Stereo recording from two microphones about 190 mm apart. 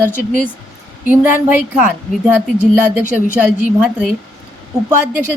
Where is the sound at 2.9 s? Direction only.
10° right (ahead or behind).